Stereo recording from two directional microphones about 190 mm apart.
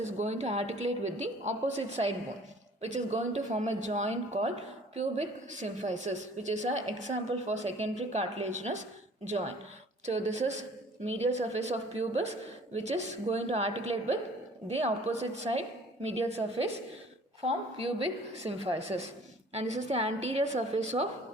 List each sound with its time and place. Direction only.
0.0 s a woman's voice: 35° right (ahead or behind)
10.1 s a woman's voice: 35° right (ahead or behind)